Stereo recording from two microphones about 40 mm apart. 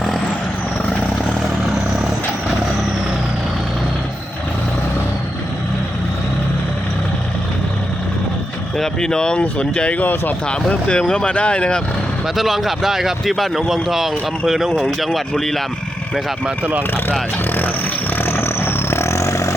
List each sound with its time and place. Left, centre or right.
8.8 s speech: centre
10.0 s speech: left
10.8 s speech: left
12.2 s speech: centre
18.2 s a sound: left